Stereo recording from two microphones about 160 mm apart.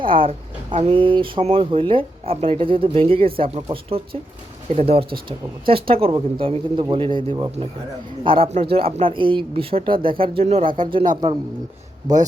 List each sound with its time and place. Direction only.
0.0 s speech: 35° right (ahead or behind)